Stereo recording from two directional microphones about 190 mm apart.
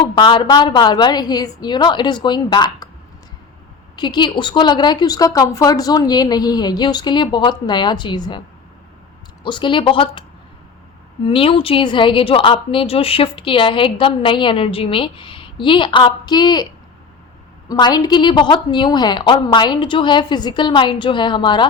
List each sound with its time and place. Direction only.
0.0 s a woman's voice: 25° left (ahead or behind)
3.9 s a woman's voice: 25° left (ahead or behind)
9.4 s a woman's voice: 25° left (ahead or behind)
11.3 s a woman's voice: 30° left (ahead or behind)
17.7 s a woman's voice: 20° left (ahead or behind)